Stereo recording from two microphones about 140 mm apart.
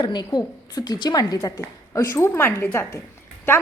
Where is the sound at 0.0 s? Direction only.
30° left (ahead or behind).